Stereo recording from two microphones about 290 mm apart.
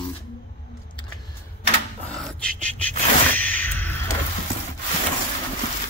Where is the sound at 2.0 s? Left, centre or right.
Centre.